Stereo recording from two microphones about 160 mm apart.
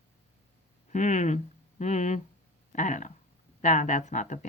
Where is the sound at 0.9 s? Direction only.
50° left (ahead or behind).